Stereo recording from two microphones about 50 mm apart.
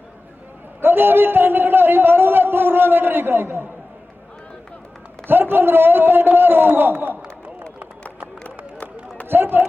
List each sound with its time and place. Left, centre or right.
0.8 s a man's voice: right
5.3 s a man's voice: right
9.3 s speech: right